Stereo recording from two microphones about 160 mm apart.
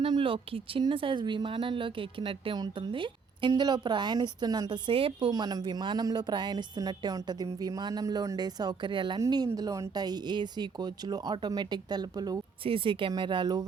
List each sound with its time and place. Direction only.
0.0 s speech: 30° right (ahead or behind)
5.3 s speech: 25° right (ahead or behind)